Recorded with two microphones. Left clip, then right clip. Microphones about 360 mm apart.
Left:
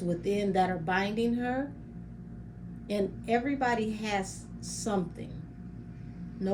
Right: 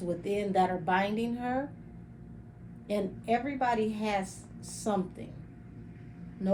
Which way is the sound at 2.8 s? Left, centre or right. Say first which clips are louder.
Even; centre.